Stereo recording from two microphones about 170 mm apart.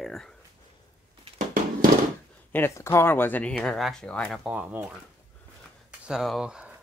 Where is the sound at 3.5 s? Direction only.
Centre (ahead or behind).